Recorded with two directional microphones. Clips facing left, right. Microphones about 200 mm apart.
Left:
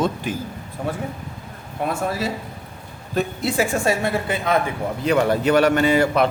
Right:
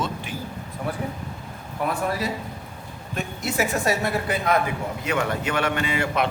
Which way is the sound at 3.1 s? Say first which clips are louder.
Left 5 dB; 30° left (ahead or behind).